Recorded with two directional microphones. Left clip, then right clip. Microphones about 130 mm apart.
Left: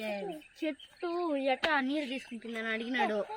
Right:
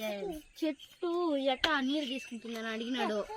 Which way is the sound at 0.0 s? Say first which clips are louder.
Even; centre (ahead or behind).